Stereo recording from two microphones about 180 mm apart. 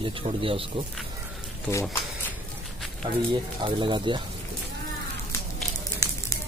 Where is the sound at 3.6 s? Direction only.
25° right (ahead or behind).